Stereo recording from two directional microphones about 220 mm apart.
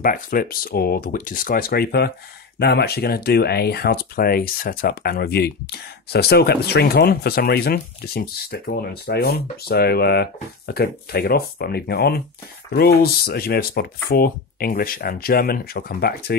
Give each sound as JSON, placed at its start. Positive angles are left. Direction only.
{"t": 0.0, "sound": "speech", "side_deg": 40}